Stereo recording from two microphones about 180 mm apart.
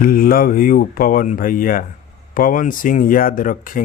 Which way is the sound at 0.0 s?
50° left (ahead or behind).